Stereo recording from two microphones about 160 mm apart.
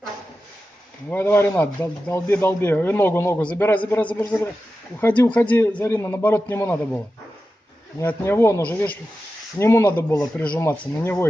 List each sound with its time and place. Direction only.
1.1 s speech: 15° left (ahead or behind)
8.0 s speech: 15° left (ahead or behind)